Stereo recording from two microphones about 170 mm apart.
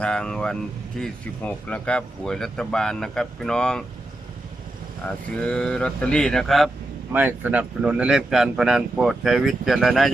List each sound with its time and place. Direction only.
0.0 s speech: 5° left (ahead or behind)
5.3 s speech: 5° left (ahead or behind)
7.1 s speech: 10° right (ahead or behind)